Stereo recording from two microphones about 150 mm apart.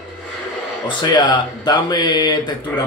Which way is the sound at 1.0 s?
30° left (ahead or behind).